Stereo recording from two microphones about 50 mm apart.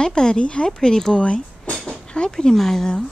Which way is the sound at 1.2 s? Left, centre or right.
Left.